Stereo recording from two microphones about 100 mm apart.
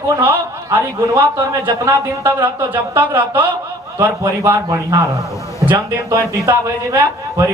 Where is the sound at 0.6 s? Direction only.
30° right (ahead or behind).